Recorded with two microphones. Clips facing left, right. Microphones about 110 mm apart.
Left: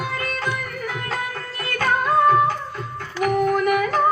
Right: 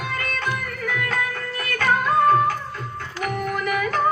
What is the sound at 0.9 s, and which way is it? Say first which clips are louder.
Music: right 6 dB; 30° left (ahead or behind).